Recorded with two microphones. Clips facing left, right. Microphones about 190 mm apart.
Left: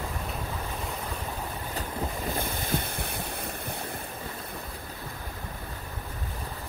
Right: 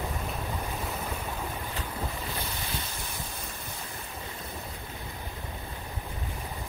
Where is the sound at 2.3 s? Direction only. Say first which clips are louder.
Left 6 dB; 50° left (ahead or behind).